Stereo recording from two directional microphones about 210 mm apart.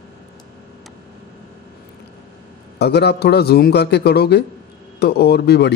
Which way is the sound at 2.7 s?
50° left (ahead or behind).